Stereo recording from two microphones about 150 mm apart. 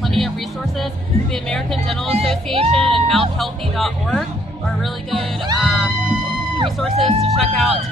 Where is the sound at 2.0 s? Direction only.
40° right (ahead or behind).